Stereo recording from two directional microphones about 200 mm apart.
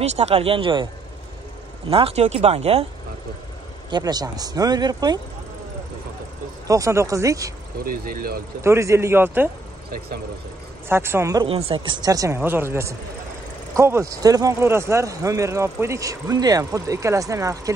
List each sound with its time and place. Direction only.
0.0 s speech: 30° right (ahead or behind)
1.9 s speech: 30° right (ahead or behind)
3.9 s speech: 20° right (ahead or behind)
6.7 s speech: 15° right (ahead or behind)
7.8 s speech: 45° right (ahead or behind)
8.6 s speech: 15° right (ahead or behind)
10.9 s speech: 10° right (ahead or behind)
11.4 s speech: 30° right (ahead or behind)